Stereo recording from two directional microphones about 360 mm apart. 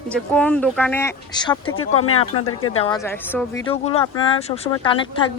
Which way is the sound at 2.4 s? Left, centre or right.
Left.